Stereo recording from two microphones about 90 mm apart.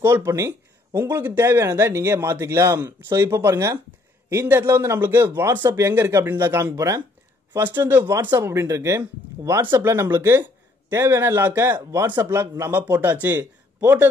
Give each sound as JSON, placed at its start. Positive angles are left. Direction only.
{"t": 0.0, "sound": "a man's voice", "side_deg": -30}
{"t": 7.5, "sound": "a man's voice", "side_deg": -20}
{"t": 8.2, "sound": "speech", "side_deg": -55}
{"t": 8.5, "sound": "a man's voice", "side_deg": -35}